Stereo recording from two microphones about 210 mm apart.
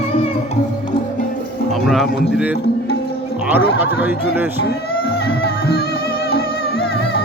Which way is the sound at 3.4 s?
10° right (ahead or behind).